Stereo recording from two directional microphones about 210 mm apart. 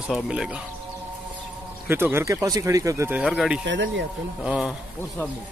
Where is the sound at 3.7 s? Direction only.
60° right (ahead or behind).